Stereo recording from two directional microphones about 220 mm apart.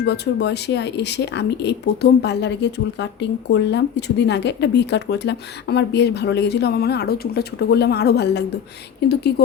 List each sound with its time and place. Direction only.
0.0 s speech: 50° left (ahead or behind)